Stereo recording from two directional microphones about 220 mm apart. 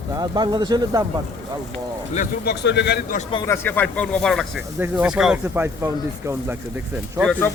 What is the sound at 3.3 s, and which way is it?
Speech, 15° left (ahead or behind).